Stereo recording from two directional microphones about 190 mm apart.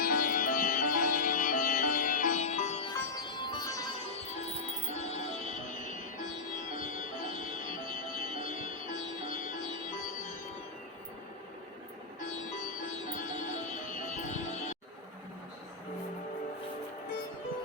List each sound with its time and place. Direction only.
0.0 s music: 45° left (ahead or behind)
3.2 s music: 25° left (ahead or behind)
4.3 s music: 35° left (ahead or behind)
7.7 s music: 25° right (ahead or behind)
8.4 s music: 40° left (ahead or behind)
12.2 s music: 40° left (ahead or behind)